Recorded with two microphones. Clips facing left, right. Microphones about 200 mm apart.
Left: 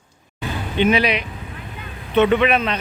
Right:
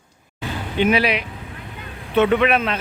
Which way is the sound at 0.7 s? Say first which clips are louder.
Left 1 dB; 5° right (ahead or behind).